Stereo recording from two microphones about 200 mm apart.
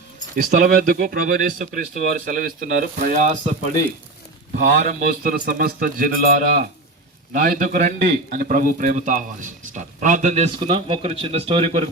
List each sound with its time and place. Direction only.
0.5 s speech: 40° right (ahead or behind)
4.6 s a man's voice: 40° right (ahead or behind)